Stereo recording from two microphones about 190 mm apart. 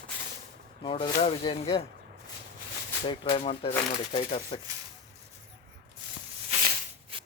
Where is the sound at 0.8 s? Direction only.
25° left (ahead or behind).